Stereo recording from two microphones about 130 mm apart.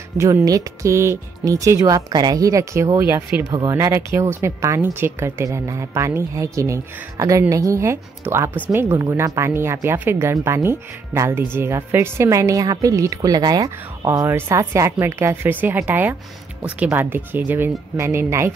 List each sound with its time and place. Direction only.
0.2 s a woman's voice: 25° right (ahead or behind)
3.4 s a woman's voice: 25° right (ahead or behind)